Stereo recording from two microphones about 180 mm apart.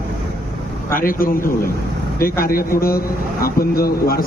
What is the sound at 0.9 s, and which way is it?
A man's voice, 50° left (ahead or behind).